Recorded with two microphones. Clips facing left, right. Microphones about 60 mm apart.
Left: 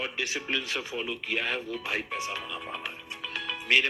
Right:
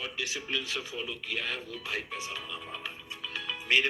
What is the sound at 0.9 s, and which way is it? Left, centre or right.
Speech, left.